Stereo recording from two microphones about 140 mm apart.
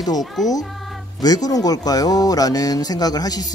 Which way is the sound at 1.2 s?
25° left (ahead or behind).